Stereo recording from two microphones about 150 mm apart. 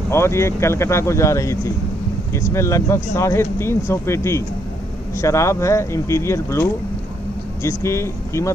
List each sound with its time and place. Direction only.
0.1 s speech: 15° left (ahead or behind)